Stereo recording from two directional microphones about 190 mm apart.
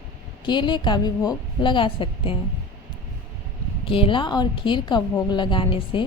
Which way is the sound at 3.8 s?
30° left (ahead or behind).